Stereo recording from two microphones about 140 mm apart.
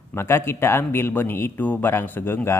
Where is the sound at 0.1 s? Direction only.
15° left (ahead or behind).